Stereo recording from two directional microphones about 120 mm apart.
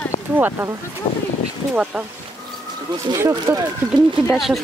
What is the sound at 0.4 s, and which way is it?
Speech, 15° right (ahead or behind).